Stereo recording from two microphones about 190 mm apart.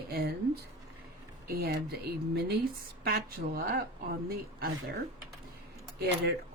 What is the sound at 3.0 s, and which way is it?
Speech, 50° right (ahead or behind).